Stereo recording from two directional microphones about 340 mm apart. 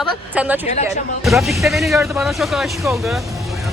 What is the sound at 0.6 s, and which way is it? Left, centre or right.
Speech, centre.